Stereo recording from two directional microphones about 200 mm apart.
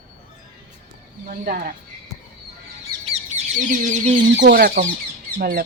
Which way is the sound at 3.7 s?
35° right (ahead or behind).